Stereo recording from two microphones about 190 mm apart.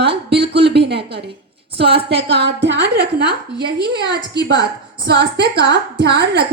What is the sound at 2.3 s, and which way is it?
Speech, 65° right (ahead or behind).